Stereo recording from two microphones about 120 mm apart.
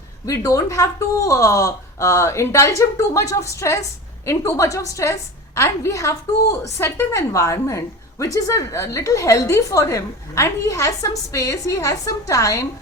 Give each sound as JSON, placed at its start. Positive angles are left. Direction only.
{"t": 0.3, "sound": "a woman's voice", "side_deg": 30}